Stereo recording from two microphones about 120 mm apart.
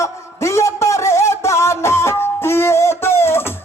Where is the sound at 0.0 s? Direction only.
25° left (ahead or behind).